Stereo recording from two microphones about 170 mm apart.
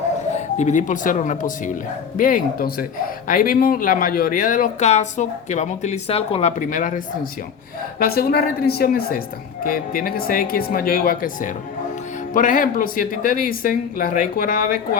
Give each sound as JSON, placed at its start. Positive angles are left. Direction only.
{"t": 0.3, "sound": "speech", "side_deg": 45}
{"t": 7.9, "sound": "speech", "side_deg": 65}